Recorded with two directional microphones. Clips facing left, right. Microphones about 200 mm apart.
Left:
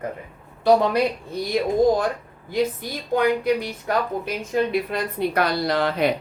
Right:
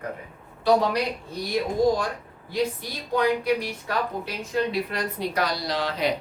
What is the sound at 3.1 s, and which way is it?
Speech, 50° left (ahead or behind).